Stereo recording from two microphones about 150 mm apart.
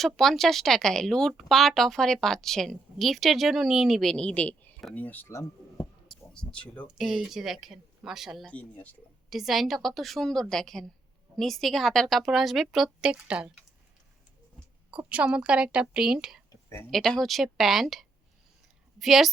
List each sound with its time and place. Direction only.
0.0 s speech: centre (ahead or behind)
5.7 s a sound: 5° left (ahead or behind)
6.8 s speech: 5° right (ahead or behind)
8.5 s speech: 10° left (ahead or behind)
9.3 s speech: centre (ahead or behind)
14.8 s speech: 10° right (ahead or behind)
16.5 s a sound: 20° left (ahead or behind)
16.9 s speech: centre (ahead or behind)